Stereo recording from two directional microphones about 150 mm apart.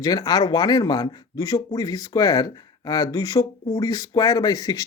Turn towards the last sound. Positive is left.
turn(degrees=25)  # may be behind; listen again after turning